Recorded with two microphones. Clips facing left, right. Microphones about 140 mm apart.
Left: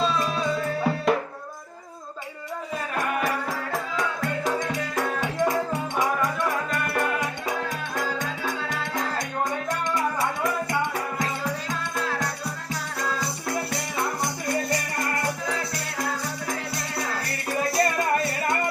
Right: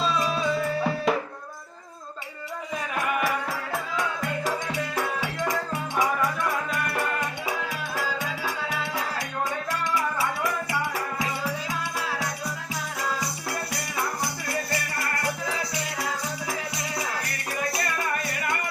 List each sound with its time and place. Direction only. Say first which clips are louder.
0.0 s music: left 1 dB; centre (ahead or behind)
2.9 s music: even; 5° right (ahead or behind)
11.2 s music: left 1 dB; 5° right (ahead or behind)
14.4 s music: left 6 dB; 20° left (ahead or behind)
17.7 s music: left 6 dB; 30° left (ahead or behind)